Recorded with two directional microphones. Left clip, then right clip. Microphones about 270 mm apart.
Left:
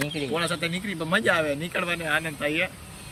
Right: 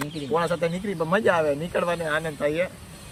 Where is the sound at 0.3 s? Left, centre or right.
Centre.